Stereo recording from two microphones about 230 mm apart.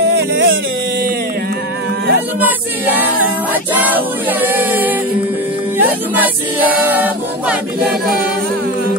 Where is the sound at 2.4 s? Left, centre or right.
Centre.